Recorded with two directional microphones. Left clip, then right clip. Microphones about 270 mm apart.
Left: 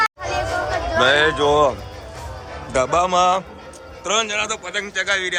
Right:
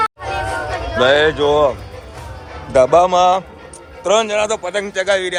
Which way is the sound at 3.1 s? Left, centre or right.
Centre.